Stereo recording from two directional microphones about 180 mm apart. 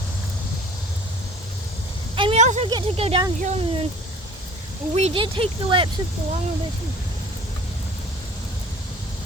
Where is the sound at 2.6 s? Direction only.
30° right (ahead or behind).